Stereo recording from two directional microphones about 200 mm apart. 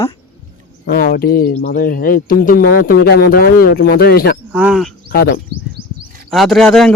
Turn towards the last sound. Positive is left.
turn(degrees=0)  # may be behind; listen again after turning